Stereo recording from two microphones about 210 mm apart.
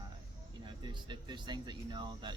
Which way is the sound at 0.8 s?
20° right (ahead or behind).